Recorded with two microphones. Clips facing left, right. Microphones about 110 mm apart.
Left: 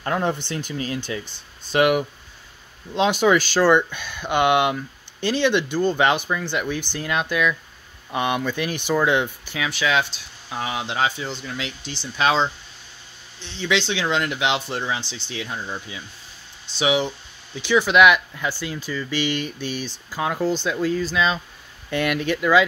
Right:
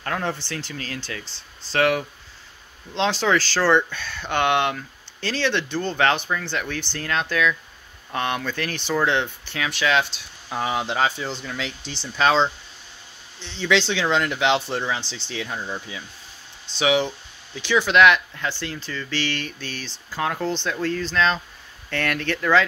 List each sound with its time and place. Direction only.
0.0 s speech: 20° left (ahead or behind)